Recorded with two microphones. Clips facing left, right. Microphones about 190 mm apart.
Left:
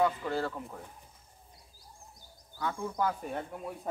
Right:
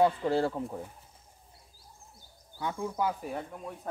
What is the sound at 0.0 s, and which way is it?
Speech, 30° right (ahead or behind).